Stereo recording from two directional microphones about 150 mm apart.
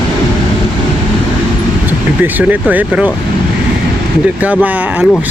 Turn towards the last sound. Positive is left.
turn(degrees=-10)  # may be behind; listen again after turning